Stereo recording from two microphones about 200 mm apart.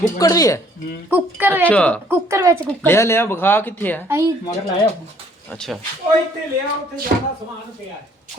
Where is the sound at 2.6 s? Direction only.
10° left (ahead or behind).